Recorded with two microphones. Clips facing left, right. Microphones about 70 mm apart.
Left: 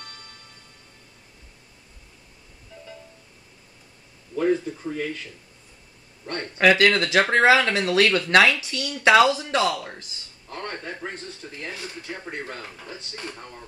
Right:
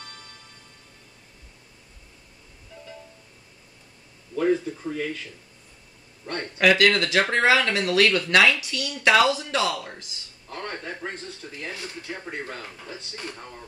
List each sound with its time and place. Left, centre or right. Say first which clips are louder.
4.4 s a man's voice: even; centre
6.8 s speech: left 1 dB; left
10.5 s speech: even; centre
11.7 s speech: even; centre
12.0 s speech: even; centre